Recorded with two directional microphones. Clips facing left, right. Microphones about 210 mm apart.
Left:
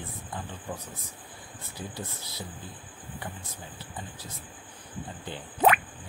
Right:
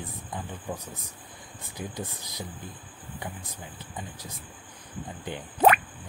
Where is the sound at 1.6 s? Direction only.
15° right (ahead or behind).